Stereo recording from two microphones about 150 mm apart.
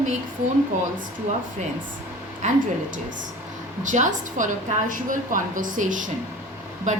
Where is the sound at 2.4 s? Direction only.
50° right (ahead or behind).